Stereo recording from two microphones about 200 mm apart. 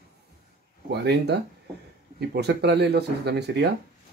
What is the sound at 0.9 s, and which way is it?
Speech, 55° right (ahead or behind).